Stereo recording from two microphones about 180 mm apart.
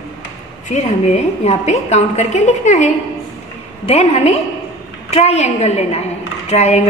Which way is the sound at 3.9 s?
35° left (ahead or behind).